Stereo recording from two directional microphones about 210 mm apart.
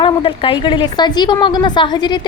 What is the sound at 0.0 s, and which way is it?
A woman's voice, 25° left (ahead or behind).